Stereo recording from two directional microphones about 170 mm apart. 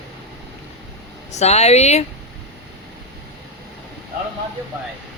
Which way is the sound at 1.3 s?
40° left (ahead or behind).